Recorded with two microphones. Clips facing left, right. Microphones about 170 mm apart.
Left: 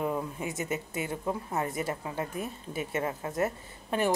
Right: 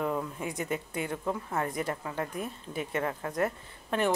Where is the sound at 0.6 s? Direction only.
5° left (ahead or behind).